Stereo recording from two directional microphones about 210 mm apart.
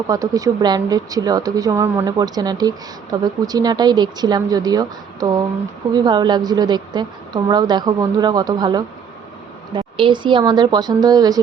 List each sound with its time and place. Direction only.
0.1 s a woman's voice: 15° right (ahead or behind)